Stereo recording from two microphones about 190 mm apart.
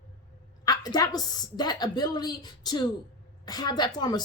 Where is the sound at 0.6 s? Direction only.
20° left (ahead or behind).